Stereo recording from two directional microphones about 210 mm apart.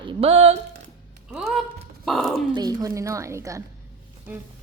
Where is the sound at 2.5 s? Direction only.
20° right (ahead or behind).